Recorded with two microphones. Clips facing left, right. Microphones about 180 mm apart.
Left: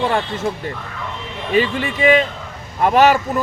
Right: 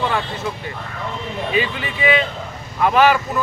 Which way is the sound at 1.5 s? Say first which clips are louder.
Left 7 dB; 45° left (ahead or behind).